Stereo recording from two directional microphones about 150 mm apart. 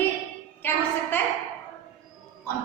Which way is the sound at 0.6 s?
15° left (ahead or behind).